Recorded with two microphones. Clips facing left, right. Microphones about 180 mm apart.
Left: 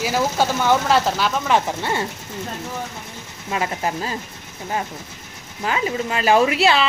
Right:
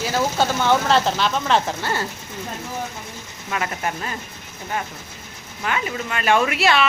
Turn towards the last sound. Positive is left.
turn(degrees=30)  # may be behind; listen again after turning